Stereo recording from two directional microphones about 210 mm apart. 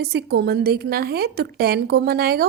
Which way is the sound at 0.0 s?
50° right (ahead or behind).